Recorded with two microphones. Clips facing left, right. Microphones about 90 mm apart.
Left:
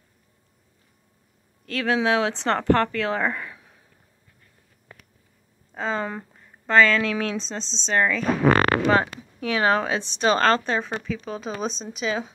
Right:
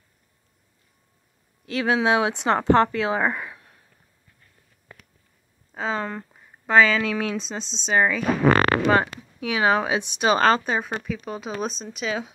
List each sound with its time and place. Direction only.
1.7 s a woman's voice: 15° right (ahead or behind); by 3.8 s centre (ahead or behind)
5.8 s speech: centre (ahead or behind)
6.3 s speech: 10° right (ahead or behind)